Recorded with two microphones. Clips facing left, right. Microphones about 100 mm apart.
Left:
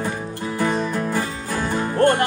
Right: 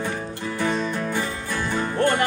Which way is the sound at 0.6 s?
45° left (ahead or behind).